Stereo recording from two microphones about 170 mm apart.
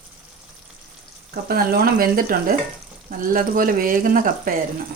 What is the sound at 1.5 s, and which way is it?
Speech, 60° right (ahead or behind).